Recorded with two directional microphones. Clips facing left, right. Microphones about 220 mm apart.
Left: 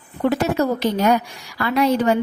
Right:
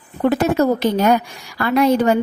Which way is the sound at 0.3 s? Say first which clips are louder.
Right 3 dB; 50° right (ahead or behind).